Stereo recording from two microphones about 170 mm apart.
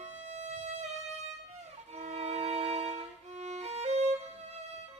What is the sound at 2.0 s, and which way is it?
Music, 40° right (ahead or behind).